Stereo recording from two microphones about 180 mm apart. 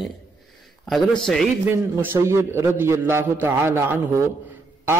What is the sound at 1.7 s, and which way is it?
A man's voice, 10° right (ahead or behind).